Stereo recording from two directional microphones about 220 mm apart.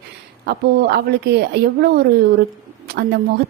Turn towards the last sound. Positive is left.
turn(degrees=-45)  # may be behind; listen again after turning